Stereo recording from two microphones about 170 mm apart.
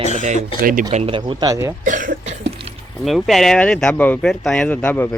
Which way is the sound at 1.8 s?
50° right (ahead or behind).